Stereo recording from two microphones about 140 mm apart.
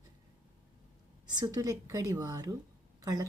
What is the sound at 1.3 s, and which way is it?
A woman's voice, 30° right (ahead or behind).